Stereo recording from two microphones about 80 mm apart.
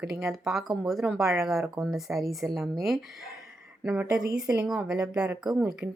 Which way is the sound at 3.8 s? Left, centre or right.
Right.